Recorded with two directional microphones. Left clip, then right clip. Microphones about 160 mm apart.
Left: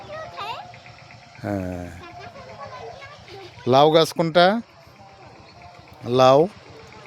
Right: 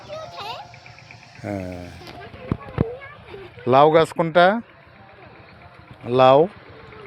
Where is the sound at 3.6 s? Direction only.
30° left (ahead or behind).